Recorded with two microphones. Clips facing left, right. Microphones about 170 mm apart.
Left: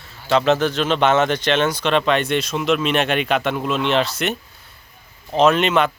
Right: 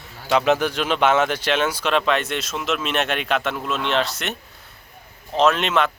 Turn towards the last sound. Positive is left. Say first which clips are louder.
# left 3 dB
turn(degrees=0)  # may be behind; listen again after turning